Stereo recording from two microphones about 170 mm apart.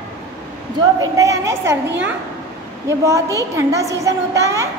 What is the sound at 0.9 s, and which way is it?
Speech, 20° right (ahead or behind).